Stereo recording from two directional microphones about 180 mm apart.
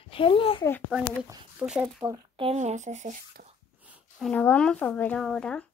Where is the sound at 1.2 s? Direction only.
5° right (ahead or behind).